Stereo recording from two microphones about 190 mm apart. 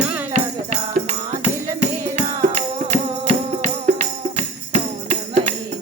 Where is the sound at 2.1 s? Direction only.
35° right (ahead or behind).